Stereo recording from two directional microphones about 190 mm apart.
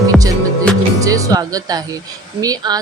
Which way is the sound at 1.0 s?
20° right (ahead or behind).